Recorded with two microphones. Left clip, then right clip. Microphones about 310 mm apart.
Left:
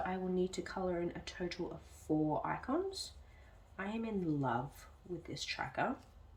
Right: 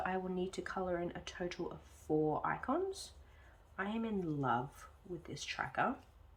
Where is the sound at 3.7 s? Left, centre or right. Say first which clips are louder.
Right 1 dB; centre.